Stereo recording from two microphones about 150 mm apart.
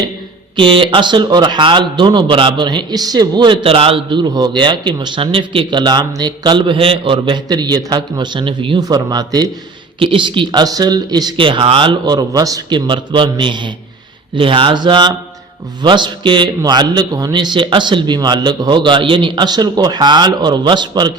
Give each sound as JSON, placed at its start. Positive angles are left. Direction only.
{"t": 0.5, "sound": "a man's voice", "side_deg": -35}